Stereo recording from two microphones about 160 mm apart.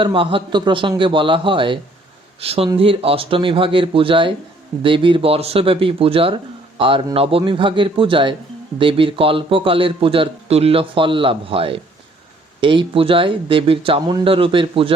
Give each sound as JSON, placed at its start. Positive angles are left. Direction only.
{"t": 0.0, "sound": "speech", "side_deg": -35}